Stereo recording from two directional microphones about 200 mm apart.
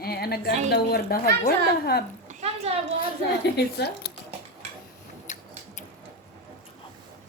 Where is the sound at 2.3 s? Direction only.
30° right (ahead or behind).